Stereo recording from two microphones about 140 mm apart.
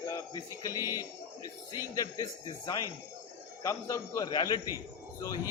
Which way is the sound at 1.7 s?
25° left (ahead or behind).